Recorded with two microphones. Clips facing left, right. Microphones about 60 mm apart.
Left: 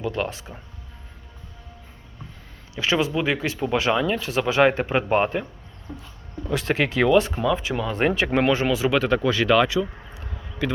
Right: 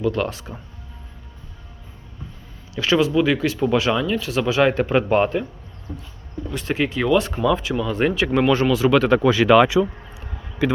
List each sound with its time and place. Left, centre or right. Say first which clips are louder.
0.0 s speech: right 4 dB; left
2.7 s speech: right 5 dB; left
4.7 s a man's voice: right 3 dB; centre
6.6 s speech: even; left
7.3 s a man's voice: right 3 dB; centre
7.6 s speech: right 2 dB; left
8.7 s a man's voice: right 4 dB; centre
9.0 s speech: right 5 dB; centre